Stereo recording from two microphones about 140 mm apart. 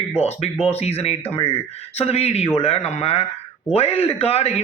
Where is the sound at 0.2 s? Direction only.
50° left (ahead or behind).